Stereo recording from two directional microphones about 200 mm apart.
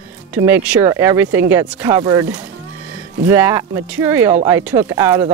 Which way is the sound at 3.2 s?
15° right (ahead or behind).